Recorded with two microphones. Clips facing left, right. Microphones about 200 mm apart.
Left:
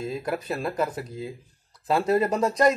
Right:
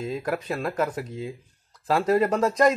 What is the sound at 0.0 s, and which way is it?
A man's voice, 5° left (ahead or behind).